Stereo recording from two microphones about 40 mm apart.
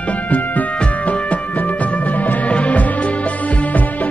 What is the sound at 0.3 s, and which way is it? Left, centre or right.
Music, left.